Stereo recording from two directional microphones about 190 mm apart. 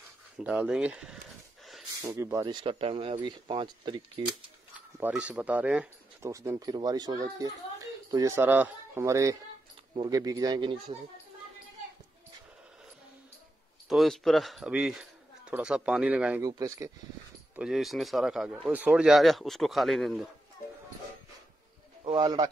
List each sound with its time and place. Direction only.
0.4 s speech: 5° right (ahead or behind)
2.0 s speech: 15° right (ahead or behind)
4.7 s speech: 5° right (ahead or behind); by 11.0 s 25° right (ahead or behind)
13.8 s speech: centre (ahead or behind)
16.4 s speech: 20° right (ahead or behind)
17.6 s speech: centre (ahead or behind)
22.0 s a man's voice: 20° right (ahead or behind)